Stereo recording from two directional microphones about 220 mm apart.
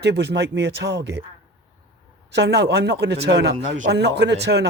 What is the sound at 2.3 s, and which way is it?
Speech, 50° right (ahead or behind).